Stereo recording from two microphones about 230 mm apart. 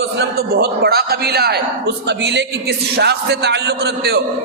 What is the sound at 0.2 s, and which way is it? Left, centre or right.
A man's voice, right.